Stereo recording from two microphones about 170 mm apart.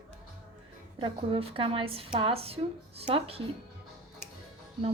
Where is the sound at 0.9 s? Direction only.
30° right (ahead or behind).